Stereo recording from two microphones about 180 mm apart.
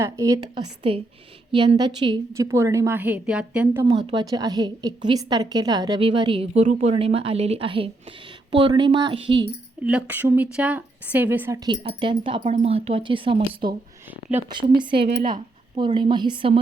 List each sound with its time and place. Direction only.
0.0 s a woman's voice: 20° right (ahead or behind)
3.8 s a woman's voice: 30° right (ahead or behind)
9.8 s a woman's voice: 10° right (ahead or behind); by 14.9 s 25° right (ahead or behind)
14.9 s speech: 65° right (ahead or behind)
15.3 s a sound: 25° right (ahead or behind)
16.0 s a woman's voice: 25° right (ahead or behind)